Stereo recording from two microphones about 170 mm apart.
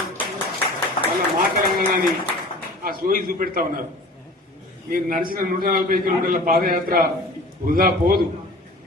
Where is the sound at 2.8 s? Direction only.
60° right (ahead or behind).